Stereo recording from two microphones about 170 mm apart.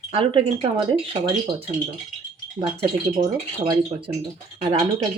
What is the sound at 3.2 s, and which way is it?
Speech, 20° right (ahead or behind).